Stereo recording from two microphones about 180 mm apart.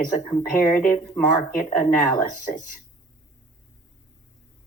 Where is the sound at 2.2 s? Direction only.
50° left (ahead or behind).